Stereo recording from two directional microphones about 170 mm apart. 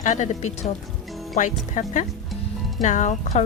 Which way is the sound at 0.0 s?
45° left (ahead or behind).